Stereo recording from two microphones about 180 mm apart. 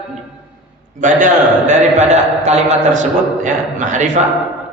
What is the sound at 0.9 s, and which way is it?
A man's voice, 45° right (ahead or behind).